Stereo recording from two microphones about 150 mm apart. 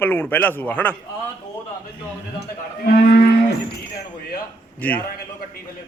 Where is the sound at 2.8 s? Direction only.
85° left.